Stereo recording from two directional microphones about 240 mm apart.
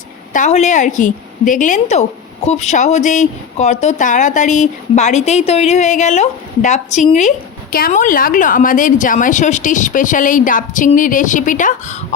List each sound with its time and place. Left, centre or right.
0.3 s speech: left